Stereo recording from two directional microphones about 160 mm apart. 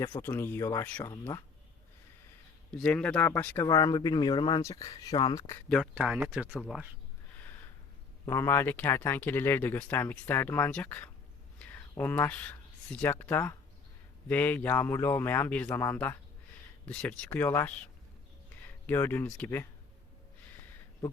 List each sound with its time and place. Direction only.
0.1 s speech: 15° left (ahead or behind)
2.7 s speech: 5° left (ahead or behind)
3.7 s speech: 25° left (ahead or behind)
5.6 s speech: 5° left (ahead or behind)
6.5 s speech: 5° left (ahead or behind)
8.2 s speech: 20° left (ahead or behind)
18.9 s speech: 15° left (ahead or behind)